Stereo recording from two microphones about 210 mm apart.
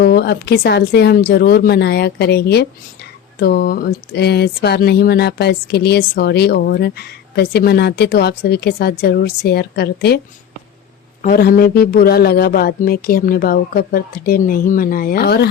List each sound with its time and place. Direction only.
0.0 s speech: 50° left (ahead or behind)
11.2 s speech: 45° left (ahead or behind)